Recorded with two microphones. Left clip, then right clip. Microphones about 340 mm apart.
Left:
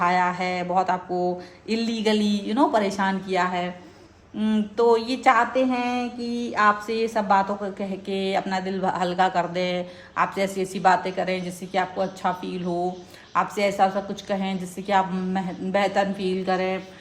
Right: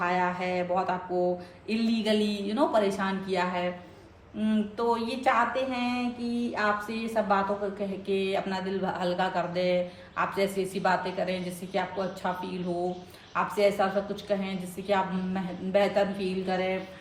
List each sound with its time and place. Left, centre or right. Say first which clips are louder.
0.0 s mantra: left 6 dB; left
1.2 s speech: left 2 dB; left